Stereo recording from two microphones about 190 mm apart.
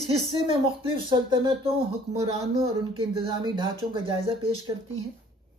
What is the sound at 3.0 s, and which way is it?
Speech, 25° right (ahead or behind).